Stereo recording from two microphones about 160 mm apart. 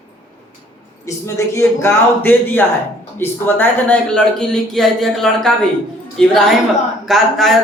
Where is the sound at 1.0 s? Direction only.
20° left (ahead or behind).